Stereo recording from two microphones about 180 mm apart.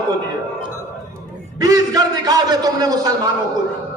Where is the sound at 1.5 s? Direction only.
20° right (ahead or behind).